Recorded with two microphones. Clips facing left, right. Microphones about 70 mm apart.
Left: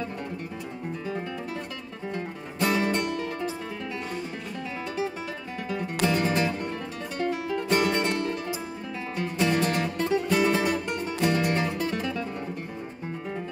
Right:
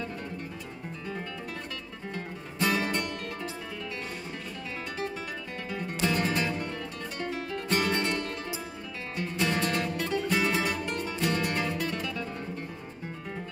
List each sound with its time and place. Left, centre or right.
2.6 s music: centre
6.0 s music: left
9.1 s music: left